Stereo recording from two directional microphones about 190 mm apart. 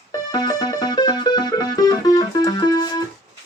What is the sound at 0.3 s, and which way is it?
Music, 20° left (ahead or behind).